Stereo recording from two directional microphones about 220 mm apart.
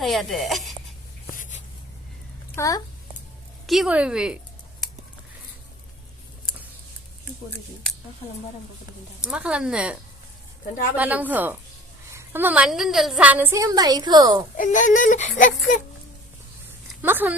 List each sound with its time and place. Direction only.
0.0 s speech: centre (ahead or behind)
1.3 s a sound: 35° left (ahead or behind)
2.6 s speech: 15° left (ahead or behind)
3.7 s speech: 5° right (ahead or behind)
9.2 s a woman's voice: 5° right (ahead or behind)
14.5 s speech: 35° left (ahead or behind)
17.0 s speech: 10° right (ahead or behind)